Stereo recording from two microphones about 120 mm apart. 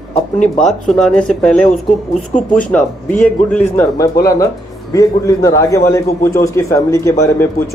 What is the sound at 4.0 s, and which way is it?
A man's voice, 25° left (ahead or behind).